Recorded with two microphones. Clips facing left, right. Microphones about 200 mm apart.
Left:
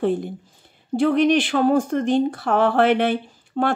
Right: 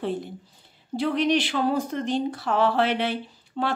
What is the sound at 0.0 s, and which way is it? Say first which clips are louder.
Speech: left 7 dB; 50° left (ahead or behind).